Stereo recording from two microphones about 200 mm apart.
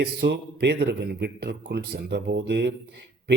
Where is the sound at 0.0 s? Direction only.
55° right (ahead or behind).